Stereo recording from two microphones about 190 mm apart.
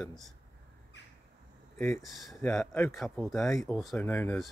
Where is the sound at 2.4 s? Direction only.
10° left (ahead or behind).